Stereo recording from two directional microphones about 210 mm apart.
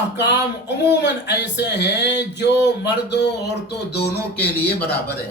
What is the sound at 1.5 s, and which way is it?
A man's voice, 55° left (ahead or behind).